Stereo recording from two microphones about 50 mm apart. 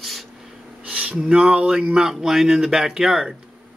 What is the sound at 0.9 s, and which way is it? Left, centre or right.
Speech, right.